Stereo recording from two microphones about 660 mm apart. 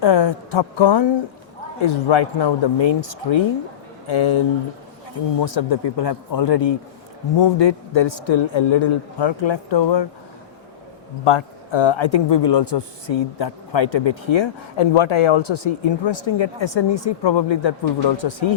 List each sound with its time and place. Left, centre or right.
0.0 s speech: left
11.3 s speech: left